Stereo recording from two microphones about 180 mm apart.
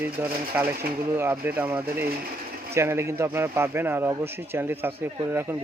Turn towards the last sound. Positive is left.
turn(degrees=-10)  # may be behind; listen again after turning